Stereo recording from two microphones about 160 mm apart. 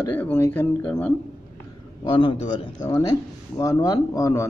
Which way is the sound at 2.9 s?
20° left (ahead or behind).